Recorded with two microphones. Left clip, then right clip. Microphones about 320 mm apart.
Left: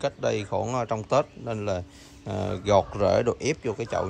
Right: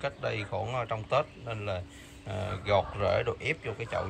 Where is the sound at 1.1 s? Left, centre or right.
Centre.